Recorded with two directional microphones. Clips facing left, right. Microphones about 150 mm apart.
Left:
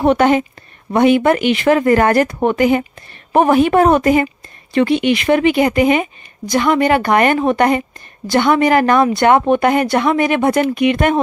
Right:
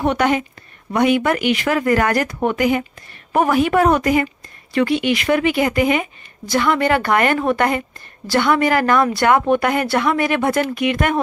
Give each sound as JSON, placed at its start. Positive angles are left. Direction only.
{"t": 0.0, "sound": "a woman's voice", "side_deg": 30}